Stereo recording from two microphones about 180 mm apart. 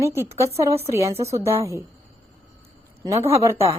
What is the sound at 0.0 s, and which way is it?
A woman's voice, 15° right (ahead or behind).